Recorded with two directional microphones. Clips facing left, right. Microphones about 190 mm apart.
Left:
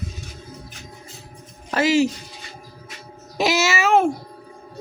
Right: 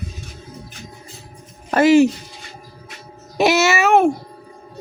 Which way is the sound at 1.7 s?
55° right (ahead or behind).